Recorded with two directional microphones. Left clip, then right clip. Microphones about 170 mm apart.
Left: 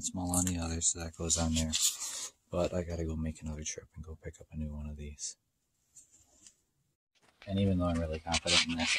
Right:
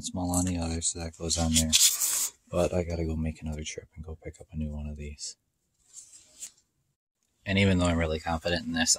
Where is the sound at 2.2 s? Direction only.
15° right (ahead or behind).